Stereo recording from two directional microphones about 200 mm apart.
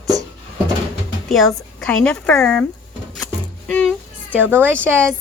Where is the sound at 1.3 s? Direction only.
5° left (ahead or behind).